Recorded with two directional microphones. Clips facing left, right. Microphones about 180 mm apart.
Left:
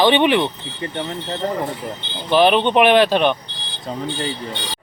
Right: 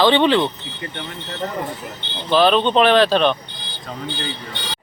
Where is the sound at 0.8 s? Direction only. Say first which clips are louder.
Left 6 dB; 35° left (ahead or behind).